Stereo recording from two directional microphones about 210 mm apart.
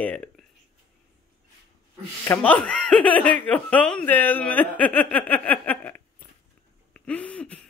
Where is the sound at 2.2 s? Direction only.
10° left (ahead or behind).